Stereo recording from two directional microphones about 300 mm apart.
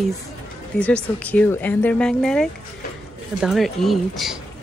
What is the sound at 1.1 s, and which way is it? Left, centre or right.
Speech, centre.